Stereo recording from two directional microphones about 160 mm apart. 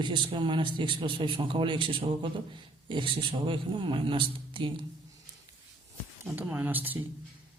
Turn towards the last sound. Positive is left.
turn(degrees=-10)  # may be behind; listen again after turning